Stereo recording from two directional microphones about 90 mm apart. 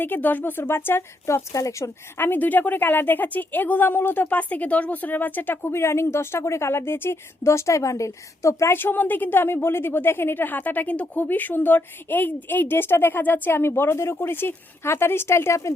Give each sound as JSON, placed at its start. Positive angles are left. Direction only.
{"t": 0.0, "sound": "a woman's voice", "side_deg": 20}
{"t": 1.5, "sound": "speech", "side_deg": 40}
{"t": 2.1, "sound": "a woman's voice", "side_deg": 20}